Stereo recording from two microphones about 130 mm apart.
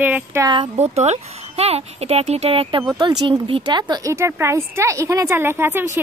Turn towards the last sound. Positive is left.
turn(degrees=-20)  # may be behind; listen again after turning